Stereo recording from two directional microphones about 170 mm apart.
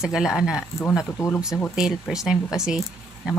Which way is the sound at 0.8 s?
15° left (ahead or behind).